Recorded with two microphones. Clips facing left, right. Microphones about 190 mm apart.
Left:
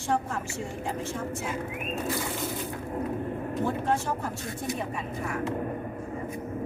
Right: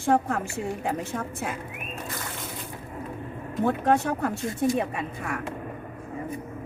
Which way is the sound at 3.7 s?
65° right (ahead or behind).